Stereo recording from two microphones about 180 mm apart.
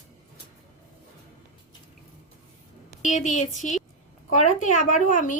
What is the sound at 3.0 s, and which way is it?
A woman's voice, 45° left (ahead or behind).